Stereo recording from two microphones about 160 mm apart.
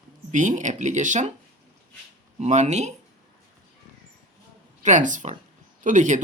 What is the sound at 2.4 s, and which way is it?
Speech, 45° right (ahead or behind).